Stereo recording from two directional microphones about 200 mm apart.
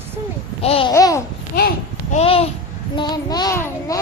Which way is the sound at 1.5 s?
50° left (ahead or behind).